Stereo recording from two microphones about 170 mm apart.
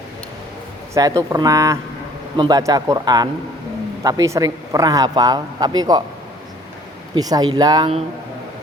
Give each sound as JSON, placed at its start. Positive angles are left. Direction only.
{"t": 0.9, "sound": "speech", "side_deg": -20}
{"t": 7.2, "sound": "speech", "side_deg": -20}